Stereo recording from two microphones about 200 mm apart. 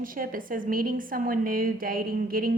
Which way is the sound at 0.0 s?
45° right (ahead or behind).